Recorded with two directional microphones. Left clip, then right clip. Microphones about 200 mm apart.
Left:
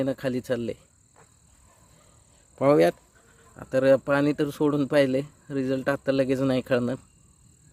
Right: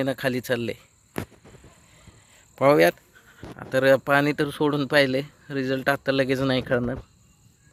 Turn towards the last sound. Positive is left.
turn(degrees=10)  # may be behind; listen again after turning